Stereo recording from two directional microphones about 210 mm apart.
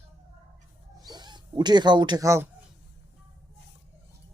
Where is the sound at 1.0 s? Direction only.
20° right (ahead or behind).